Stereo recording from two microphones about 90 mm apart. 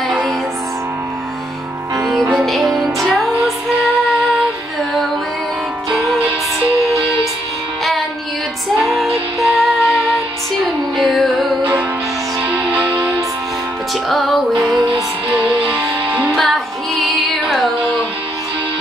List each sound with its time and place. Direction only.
2.3 s music: centre (ahead or behind)
8.8 s music: centre (ahead or behind)
12.4 s music: 15° right (ahead or behind)
14.0 s music: centre (ahead or behind)
15.3 s music: 15° right (ahead or behind)
16.3 s music: centre (ahead or behind)